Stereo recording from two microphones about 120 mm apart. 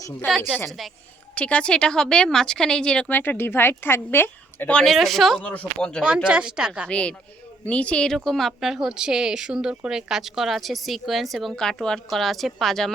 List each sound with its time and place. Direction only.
0.3 s a woman's voice: 5° right (ahead or behind)
1.4 s speech: 10° left (ahead or behind)
4.9 s a woman's voice: centre (ahead or behind)
6.2 s a woman's voice: 10° right (ahead or behind)
6.8 s a woman's voice: 10° left (ahead or behind)